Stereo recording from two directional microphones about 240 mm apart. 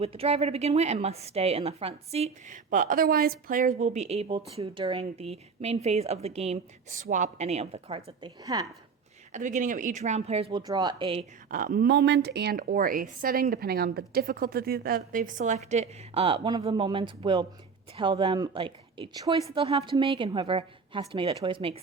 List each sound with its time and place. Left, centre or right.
0.0 s a woman's voice: right
9.3 s a woman's voice: right
11.5 s a woman's voice: right